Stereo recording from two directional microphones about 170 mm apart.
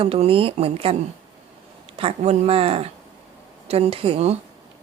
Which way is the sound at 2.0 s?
35° right (ahead or behind).